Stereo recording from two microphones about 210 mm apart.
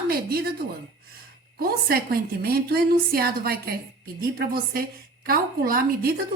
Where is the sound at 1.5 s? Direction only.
45° right (ahead or behind).